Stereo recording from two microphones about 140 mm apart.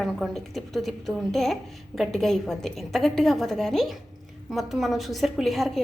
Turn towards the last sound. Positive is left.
turn(degrees=0)  # may be behind; listen again after turning